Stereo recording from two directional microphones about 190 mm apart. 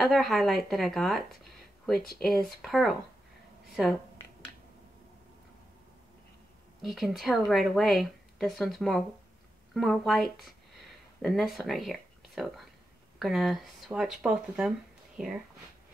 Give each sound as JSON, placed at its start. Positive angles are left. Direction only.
{"t": 0.0, "sound": "speech", "side_deg": 0}
{"t": 2.0, "sound": "speech", "side_deg": 50}
{"t": 2.2, "sound": "a woman's voice", "side_deg": 0}
{"t": 6.8, "sound": "a woman's voice", "side_deg": 0}